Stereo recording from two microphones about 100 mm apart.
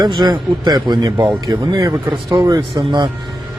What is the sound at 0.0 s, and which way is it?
Speech, 45° right (ahead or behind).